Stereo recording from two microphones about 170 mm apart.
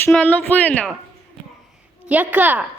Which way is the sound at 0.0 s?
10° left (ahead or behind).